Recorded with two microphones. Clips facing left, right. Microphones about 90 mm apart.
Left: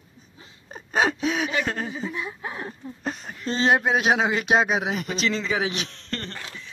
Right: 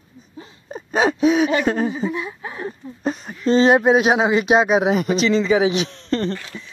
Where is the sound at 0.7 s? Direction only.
5° right (ahead or behind).